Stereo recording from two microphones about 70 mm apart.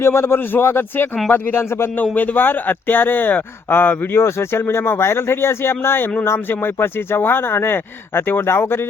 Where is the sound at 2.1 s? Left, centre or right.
Left.